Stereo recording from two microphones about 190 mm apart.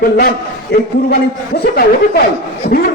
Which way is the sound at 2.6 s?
55° left (ahead or behind).